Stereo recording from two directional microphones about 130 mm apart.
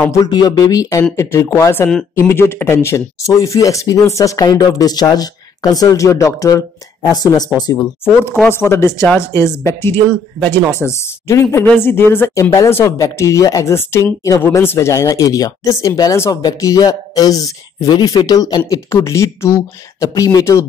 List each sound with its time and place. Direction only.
0.2 s speech: 30° left (ahead or behind)
8.0 s speech: 20° left (ahead or behind)